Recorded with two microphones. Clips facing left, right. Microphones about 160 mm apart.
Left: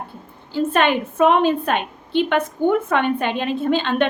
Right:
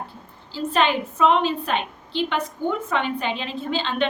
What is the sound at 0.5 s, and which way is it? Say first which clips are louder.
A woman's voice: left 4 dB; 55° left (ahead or behind).